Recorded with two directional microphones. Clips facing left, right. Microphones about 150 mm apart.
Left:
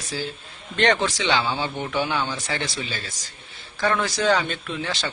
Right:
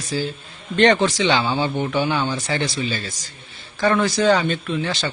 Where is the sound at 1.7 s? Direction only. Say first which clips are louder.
Right 6 dB; 20° right (ahead or behind).